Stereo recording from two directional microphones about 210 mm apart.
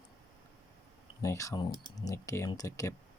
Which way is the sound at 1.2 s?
15° left (ahead or behind).